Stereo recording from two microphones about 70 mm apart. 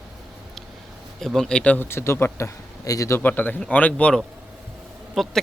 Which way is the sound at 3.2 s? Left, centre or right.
Left.